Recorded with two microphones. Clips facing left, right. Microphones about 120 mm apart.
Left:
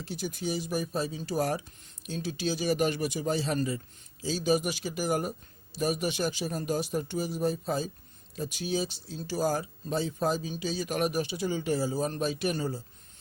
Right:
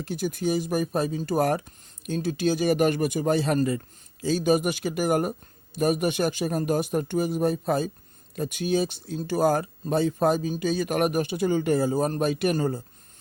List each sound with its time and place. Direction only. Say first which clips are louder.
0.0 s speech: right 7 dB; 50° right (ahead or behind)